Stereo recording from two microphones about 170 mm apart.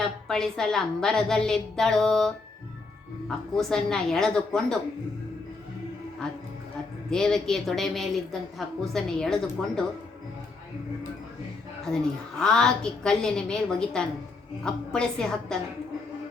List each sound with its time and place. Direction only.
0.0 s a woman's voice: centre (ahead or behind)
7.1 s a woman's voice: 5° left (ahead or behind)
11.9 s a woman's voice: 5° left (ahead or behind)